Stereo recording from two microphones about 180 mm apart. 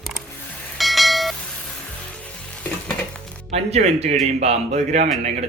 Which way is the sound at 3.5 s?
35° right (ahead or behind).